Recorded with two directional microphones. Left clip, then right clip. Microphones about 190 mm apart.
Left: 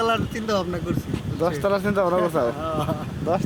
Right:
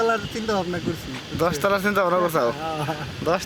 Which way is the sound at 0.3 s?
5° right (ahead or behind).